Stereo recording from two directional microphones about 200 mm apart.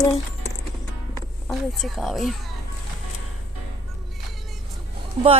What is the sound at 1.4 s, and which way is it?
Speech, centre (ahead or behind).